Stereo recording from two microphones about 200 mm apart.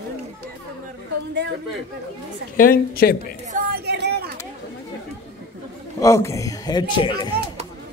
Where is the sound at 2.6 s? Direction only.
45° left (ahead or behind).